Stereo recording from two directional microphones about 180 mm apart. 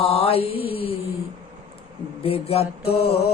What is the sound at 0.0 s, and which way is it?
Mantra, 35° left (ahead or behind).